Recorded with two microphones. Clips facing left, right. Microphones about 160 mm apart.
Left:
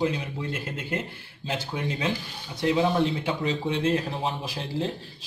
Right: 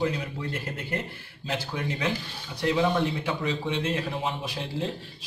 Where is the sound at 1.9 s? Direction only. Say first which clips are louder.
Left 1 dB; 30° left (ahead or behind).